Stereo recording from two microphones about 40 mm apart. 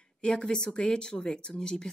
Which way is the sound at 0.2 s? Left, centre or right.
Left.